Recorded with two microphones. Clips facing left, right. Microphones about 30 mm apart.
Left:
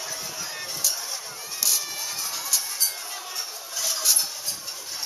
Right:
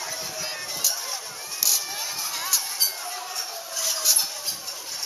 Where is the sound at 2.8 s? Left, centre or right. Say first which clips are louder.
Right 2 dB; centre.